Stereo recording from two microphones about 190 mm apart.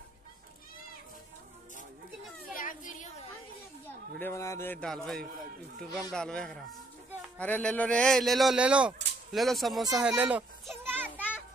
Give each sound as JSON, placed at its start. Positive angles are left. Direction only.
{"t": 2.5, "sound": "children playing", "side_deg": 45}
{"t": 4.2, "sound": "a man's voice", "side_deg": 15}
{"t": 9.9, "sound": "children playing", "side_deg": -5}